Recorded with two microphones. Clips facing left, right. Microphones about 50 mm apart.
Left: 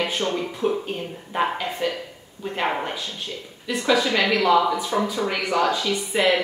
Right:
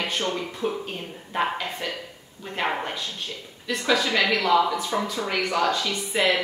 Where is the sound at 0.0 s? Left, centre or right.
Centre.